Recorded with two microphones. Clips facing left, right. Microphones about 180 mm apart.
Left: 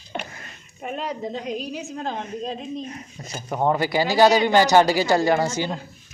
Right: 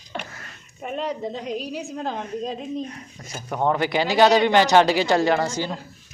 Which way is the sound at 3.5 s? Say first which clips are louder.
Left 1 dB; 5° left (ahead or behind).